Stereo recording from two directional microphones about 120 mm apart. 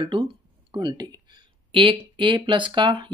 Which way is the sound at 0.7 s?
35° right (ahead or behind).